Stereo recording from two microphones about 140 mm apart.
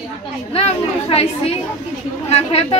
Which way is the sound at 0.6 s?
45° left (ahead or behind).